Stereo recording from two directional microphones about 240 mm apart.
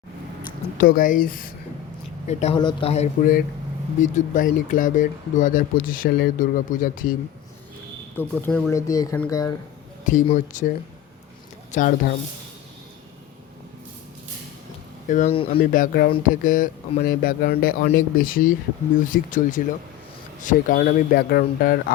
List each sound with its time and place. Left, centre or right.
0.8 s speech: left
2.2 s speech: left
8.1 s speech: centre
10.0 s speech: left
11.7 s speech: left
15.0 s speech: left
15.6 s speech: left